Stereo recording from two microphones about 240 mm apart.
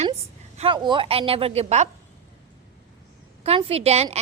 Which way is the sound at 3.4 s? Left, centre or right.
Right.